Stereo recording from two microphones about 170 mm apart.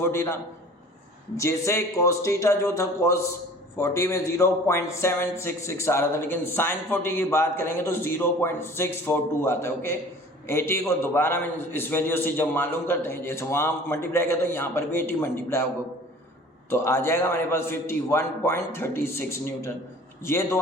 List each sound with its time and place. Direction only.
0.0 s a man's voice: 15° left (ahead or behind)
1.4 s a man's voice: 15° left (ahead or behind)
16.6 s a man's voice: 15° left (ahead or behind)